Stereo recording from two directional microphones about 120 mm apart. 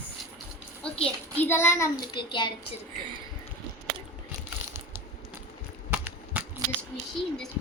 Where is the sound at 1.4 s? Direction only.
20° left (ahead or behind).